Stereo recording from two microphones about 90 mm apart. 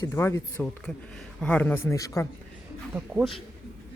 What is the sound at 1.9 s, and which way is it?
Speech, 40° left (ahead or behind).